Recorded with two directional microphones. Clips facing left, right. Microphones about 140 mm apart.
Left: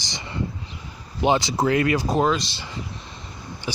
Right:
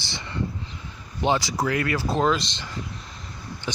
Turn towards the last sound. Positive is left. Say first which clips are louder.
# left 1 dB
turn(degrees=10)  # may be behind; listen again after turning